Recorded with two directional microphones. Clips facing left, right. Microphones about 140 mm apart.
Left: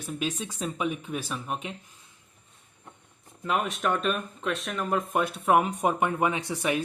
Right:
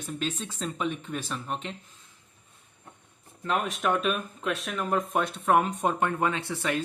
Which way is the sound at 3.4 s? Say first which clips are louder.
Even; centre (ahead or behind).